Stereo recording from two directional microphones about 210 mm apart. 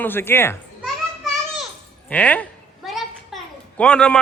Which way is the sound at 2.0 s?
5° left (ahead or behind).